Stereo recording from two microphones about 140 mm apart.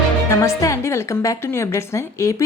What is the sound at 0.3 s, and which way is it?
A woman's voice, 20° left (ahead or behind).